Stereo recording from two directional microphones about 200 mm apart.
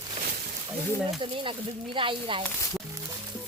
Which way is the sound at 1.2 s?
25° right (ahead or behind).